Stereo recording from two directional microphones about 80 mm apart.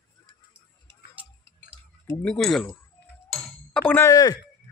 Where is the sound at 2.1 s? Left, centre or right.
Centre.